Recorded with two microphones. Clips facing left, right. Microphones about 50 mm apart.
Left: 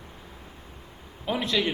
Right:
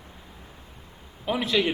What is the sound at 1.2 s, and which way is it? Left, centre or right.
Speech, centre.